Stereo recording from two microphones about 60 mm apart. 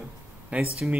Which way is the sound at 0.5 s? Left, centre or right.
Right.